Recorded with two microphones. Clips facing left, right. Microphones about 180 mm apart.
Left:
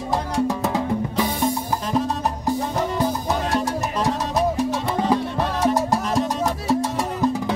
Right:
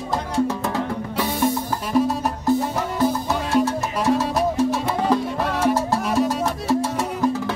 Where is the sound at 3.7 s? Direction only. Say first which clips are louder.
Right 2 dB; 15° left (ahead or behind).